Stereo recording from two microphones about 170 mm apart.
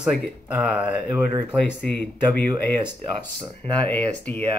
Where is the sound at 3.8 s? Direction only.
10° left (ahead or behind).